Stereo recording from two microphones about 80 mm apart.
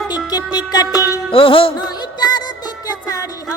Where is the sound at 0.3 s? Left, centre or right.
Left.